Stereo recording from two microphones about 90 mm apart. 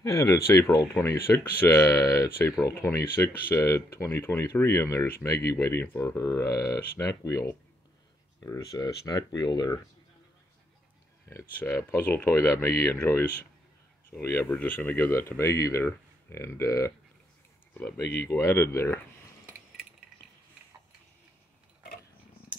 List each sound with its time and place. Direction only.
0.0 s speech: 35° left (ahead or behind)
2.2 s speech: 25° left (ahead or behind); by 9.7 s 50° left (ahead or behind)
11.2 s speech: 30° left (ahead or behind)
17.9 s speech: 35° left (ahead or behind)